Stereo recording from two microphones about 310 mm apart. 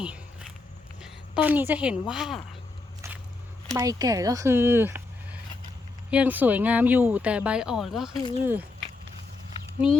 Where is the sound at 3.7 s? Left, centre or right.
Centre.